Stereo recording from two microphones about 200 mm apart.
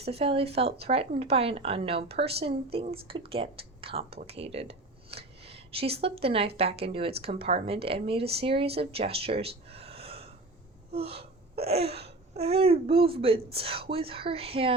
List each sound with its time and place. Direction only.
0.0 s speech: 30° right (ahead or behind)
11.6 s a sound: 30° right (ahead or behind)
12.3 s speech: 30° right (ahead or behind)